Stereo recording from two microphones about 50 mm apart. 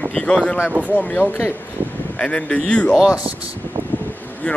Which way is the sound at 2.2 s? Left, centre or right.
Left.